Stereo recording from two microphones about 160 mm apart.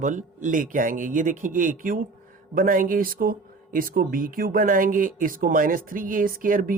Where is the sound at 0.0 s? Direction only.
50° right (ahead or behind).